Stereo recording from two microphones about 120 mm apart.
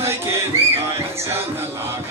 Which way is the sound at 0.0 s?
20° right (ahead or behind).